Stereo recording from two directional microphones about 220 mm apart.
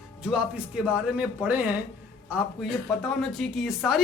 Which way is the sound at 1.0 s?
5° right (ahead or behind).